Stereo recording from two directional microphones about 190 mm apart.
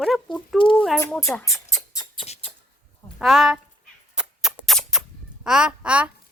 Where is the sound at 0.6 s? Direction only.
25° left (ahead or behind).